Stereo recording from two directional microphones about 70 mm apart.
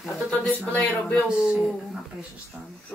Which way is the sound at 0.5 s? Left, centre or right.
Left.